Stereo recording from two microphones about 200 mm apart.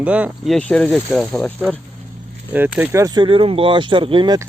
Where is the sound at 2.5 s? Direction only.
10° right (ahead or behind).